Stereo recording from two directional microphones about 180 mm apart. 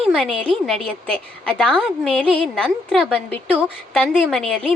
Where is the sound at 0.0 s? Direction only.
5° left (ahead or behind).